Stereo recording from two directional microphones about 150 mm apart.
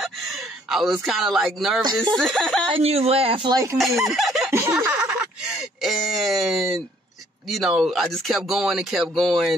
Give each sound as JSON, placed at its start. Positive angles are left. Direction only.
{"t": 0.0, "sound": "gasp", "side_deg": 0}
{"t": 1.0, "sound": "speech", "side_deg": 0}
{"t": 2.7, "sound": "speech", "side_deg": -40}
{"t": 3.7, "sound": "speech", "side_deg": 0}
{"t": 4.5, "sound": "a sound", "side_deg": -20}
{"t": 5.8, "sound": "speech", "side_deg": 0}